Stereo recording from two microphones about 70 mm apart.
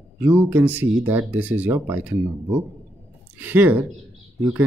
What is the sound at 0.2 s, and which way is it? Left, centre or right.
Speech, right.